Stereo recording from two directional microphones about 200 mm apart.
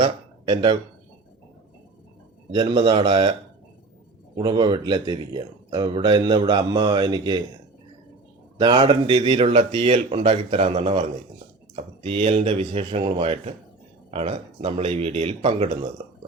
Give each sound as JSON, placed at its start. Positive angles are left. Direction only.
{"t": 0.0, "sound": "a sound", "side_deg": -25}
{"t": 2.5, "sound": "speech", "side_deg": -25}
{"t": 4.4, "sound": "speech", "side_deg": -25}
{"t": 8.5, "sound": "speech", "side_deg": -25}